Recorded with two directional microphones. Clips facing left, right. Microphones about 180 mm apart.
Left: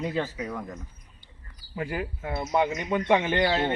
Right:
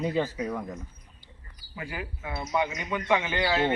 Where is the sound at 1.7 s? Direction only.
40° left (ahead or behind).